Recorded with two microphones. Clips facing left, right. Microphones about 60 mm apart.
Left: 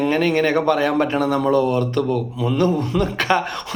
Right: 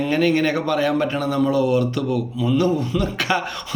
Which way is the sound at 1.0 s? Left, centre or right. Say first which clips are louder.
Left 2 dB; left.